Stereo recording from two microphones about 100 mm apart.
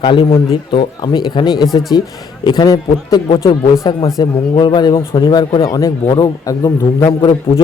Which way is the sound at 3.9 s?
50° left (ahead or behind).